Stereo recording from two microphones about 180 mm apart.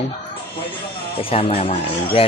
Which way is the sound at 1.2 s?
30° left (ahead or behind).